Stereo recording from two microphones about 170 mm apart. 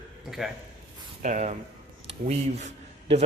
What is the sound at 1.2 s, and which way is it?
A man's voice, 45° right (ahead or behind).